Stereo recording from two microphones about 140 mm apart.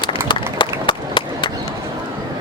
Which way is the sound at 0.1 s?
35° left (ahead or behind).